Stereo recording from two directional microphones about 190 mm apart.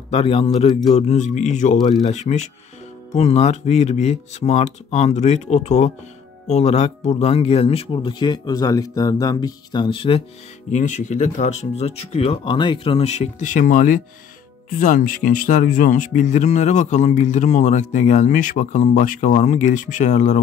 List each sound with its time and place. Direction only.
0.1 s speech: 30° left (ahead or behind)
10.7 s speech: 40° left (ahead or behind)